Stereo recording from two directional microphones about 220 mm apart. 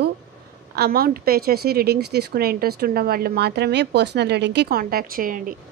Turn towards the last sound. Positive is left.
turn(degrees=-40)  # may be behind; listen again after turning